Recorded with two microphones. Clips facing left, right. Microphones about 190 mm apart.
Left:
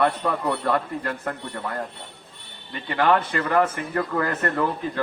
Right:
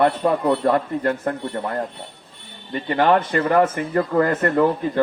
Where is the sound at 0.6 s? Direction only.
30° right (ahead or behind).